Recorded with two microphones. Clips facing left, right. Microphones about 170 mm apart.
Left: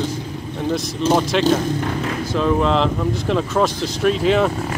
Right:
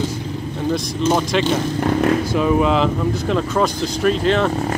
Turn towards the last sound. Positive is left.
turn(degrees=5)  # may be behind; listen again after turning